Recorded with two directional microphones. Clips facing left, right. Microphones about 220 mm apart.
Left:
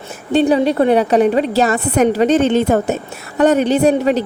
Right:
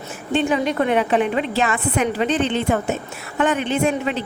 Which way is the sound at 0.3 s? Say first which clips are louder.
Left 7 dB; 35° left (ahead or behind).